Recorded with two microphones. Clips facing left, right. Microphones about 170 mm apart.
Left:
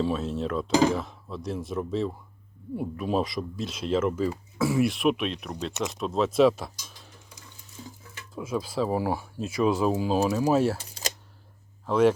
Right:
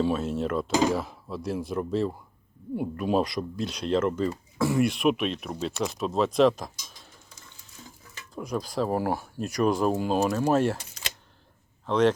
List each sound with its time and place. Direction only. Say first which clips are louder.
0.0 s speech: right 1 dB; centre (ahead or behind)
11.0 s camera: left 5 dB; 30° left (ahead or behind)
11.9 s speech: left 1 dB; 10° left (ahead or behind)